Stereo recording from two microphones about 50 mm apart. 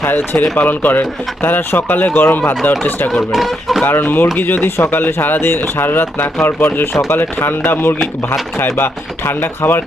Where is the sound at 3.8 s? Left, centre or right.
Left.